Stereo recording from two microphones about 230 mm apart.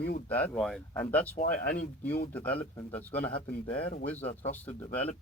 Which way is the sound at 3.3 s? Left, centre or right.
Left.